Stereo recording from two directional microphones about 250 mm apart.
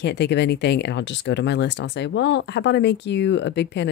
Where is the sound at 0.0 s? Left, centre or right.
Left.